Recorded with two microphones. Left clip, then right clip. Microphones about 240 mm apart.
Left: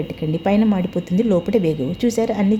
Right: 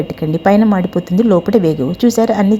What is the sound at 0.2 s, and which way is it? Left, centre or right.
Speech, centre.